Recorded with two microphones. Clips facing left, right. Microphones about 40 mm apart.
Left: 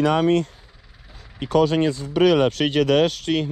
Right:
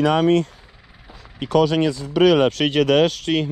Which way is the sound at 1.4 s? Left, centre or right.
Right.